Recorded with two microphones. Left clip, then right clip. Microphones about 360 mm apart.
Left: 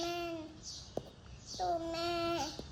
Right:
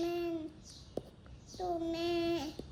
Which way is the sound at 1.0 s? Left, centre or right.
Centre.